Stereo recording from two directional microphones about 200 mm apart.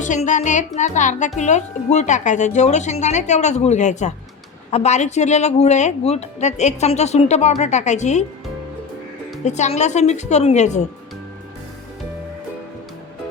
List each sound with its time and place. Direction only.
0.0 s speech: 40° left (ahead or behind)
9.4 s speech: 35° left (ahead or behind)